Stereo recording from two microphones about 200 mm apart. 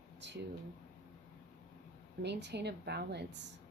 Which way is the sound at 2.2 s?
60° right (ahead or behind).